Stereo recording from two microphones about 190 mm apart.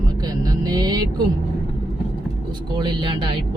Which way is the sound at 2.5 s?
20° right (ahead or behind).